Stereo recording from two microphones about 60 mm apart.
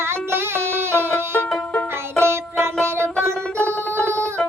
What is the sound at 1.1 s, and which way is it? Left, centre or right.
Music, left.